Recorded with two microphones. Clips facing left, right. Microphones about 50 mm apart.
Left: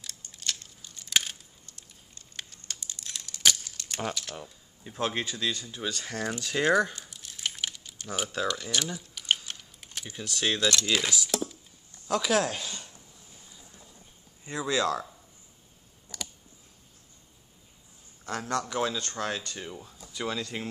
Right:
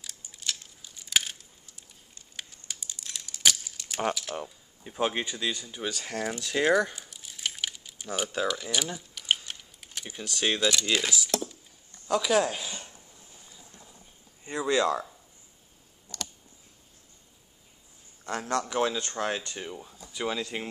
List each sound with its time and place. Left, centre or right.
0.0 s a sound: centre
4.1 s speech: centre
7.7 s typing: centre
8.3 s speech: centre
9.1 s a sound: centre
10.0 s speech: centre
14.4 s speech: right
18.4 s speech: centre
18.7 s speech: right